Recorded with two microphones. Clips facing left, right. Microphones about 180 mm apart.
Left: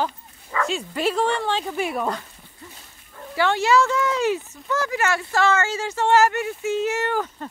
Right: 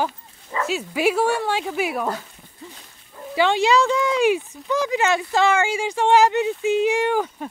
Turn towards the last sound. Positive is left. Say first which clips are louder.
# right 4 dB
turn(degrees=-15)  # may be behind; listen again after turning